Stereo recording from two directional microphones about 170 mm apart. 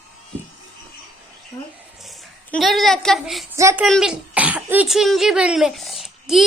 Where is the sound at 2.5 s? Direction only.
Centre (ahead or behind).